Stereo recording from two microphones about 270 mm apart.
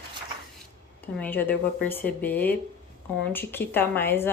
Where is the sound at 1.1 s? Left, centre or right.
Centre.